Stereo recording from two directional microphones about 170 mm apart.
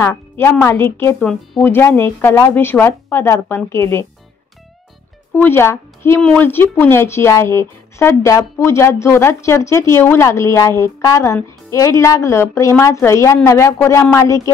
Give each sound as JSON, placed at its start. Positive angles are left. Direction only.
{"t": 0.0, "sound": "a woman's voice", "side_deg": 15}
{"t": 5.3, "sound": "a woman's voice", "side_deg": 10}